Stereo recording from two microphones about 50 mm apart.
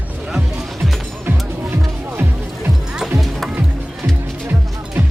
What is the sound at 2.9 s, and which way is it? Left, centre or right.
Music, centre.